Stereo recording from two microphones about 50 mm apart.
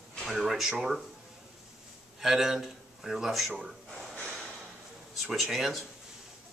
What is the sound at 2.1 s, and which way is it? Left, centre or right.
A man's voice, centre.